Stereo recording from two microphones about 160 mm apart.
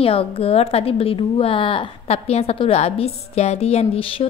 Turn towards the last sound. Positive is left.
turn(degrees=35)  # may be behind; listen again after turning